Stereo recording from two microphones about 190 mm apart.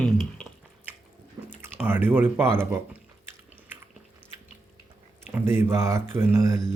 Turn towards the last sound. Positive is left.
turn(degrees=-15)  # may be behind; listen again after turning